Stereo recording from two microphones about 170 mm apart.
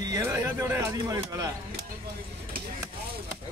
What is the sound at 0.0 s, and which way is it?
Speech, 20° right (ahead or behind).